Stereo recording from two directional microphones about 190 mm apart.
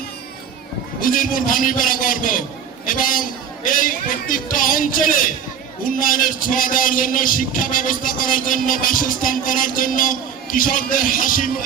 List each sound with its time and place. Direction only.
1.0 s a man's voice: 45° left (ahead or behind)